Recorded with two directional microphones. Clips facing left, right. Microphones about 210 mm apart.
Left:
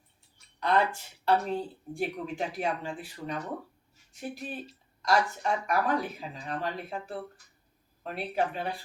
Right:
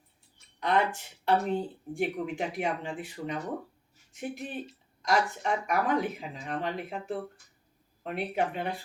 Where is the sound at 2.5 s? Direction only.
20° right (ahead or behind).